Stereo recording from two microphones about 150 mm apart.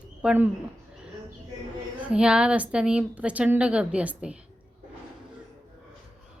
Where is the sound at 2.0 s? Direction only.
5° right (ahead or behind).